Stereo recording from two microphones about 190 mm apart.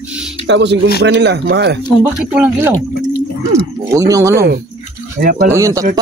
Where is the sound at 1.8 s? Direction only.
Centre (ahead or behind).